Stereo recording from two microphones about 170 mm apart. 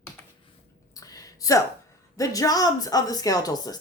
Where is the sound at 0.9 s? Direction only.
20° left (ahead or behind).